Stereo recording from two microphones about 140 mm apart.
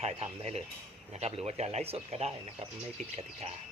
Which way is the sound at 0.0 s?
45° right (ahead or behind).